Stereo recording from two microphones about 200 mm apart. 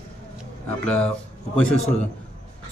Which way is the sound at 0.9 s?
5° left (ahead or behind).